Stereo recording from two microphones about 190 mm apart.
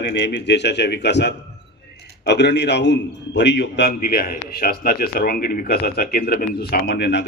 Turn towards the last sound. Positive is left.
turn(degrees=65)  # may be behind; listen again after turning